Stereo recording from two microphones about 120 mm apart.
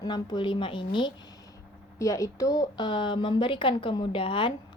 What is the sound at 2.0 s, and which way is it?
Speech, 25° left (ahead or behind).